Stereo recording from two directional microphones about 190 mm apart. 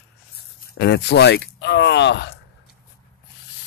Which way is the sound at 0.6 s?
60° left (ahead or behind).